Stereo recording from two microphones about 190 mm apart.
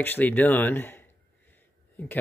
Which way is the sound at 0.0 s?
10° left (ahead or behind).